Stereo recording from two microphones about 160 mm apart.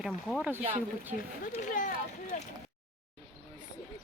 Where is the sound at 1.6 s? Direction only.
55° left (ahead or behind).